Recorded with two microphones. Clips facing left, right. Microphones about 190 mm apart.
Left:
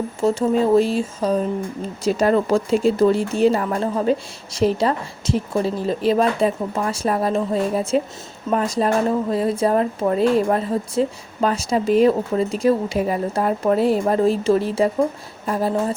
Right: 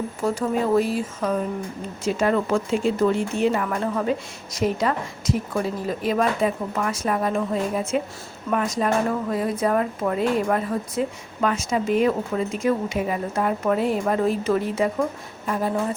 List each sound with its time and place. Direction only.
0.2 s speech: 25° left (ahead or behind)